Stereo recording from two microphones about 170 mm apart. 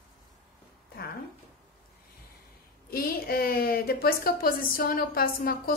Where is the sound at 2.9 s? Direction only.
60° left (ahead or behind).